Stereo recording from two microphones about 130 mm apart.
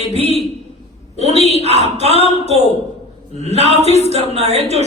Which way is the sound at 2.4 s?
60° right (ahead or behind).